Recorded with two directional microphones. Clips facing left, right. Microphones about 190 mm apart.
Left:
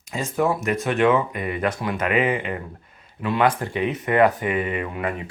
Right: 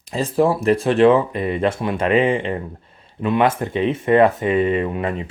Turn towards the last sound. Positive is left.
turn(degrees=-25)  # may be behind; listen again after turning